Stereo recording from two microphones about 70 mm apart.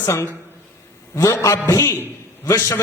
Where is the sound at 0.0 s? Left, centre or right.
Left.